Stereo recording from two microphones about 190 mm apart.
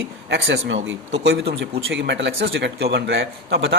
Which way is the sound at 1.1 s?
60° right (ahead or behind).